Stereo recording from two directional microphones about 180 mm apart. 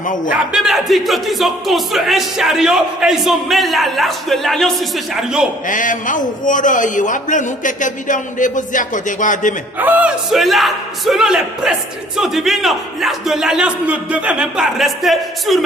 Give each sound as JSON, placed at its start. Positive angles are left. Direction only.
{"t": 0.0, "sound": "a man's voice", "side_deg": 45}
{"t": 0.5, "sound": "speech", "side_deg": 0}
{"t": 5.6, "sound": "a man's voice", "side_deg": 45}
{"t": 9.7, "sound": "speech", "side_deg": -10}